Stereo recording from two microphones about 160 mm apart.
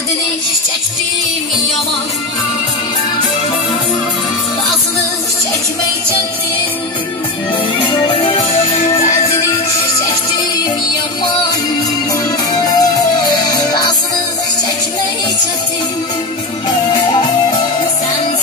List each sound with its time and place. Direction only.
7.9 s music: 35° left (ahead or behind)
12.5 s music: 25° left (ahead or behind)
16.9 s music: 25° left (ahead or behind)